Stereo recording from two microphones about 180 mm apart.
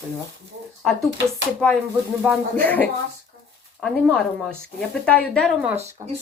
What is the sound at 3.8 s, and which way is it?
Speech, 5° left (ahead or behind).